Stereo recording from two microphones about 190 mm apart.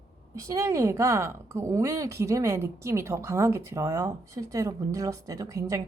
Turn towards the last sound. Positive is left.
turn(degrees=-20)  # may be behind; listen again after turning